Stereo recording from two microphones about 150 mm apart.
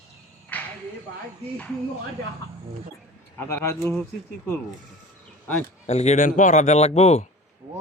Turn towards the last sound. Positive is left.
turn(degrees=45)  # may be behind; listen again after turning